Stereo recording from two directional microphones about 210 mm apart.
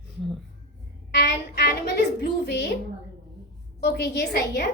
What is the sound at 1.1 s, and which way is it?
A child's voice, 50° left (ahead or behind).